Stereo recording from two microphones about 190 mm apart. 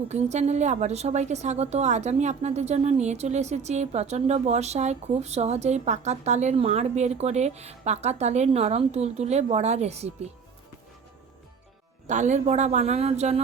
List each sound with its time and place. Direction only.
0.1 s a woman's voice: 35° right (ahead or behind)
12.0 s a woman's voice: 40° right (ahead or behind)